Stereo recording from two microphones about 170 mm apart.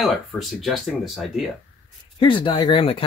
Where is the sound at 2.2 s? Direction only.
30° left (ahead or behind).